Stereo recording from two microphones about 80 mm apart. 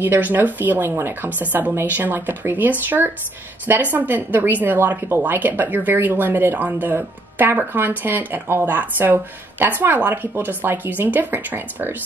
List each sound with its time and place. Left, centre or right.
0.0 s speech: right